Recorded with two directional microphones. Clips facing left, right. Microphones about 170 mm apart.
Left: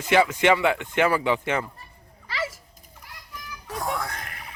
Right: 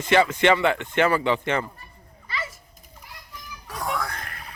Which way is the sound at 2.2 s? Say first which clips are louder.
Left 3 dB; 90° left.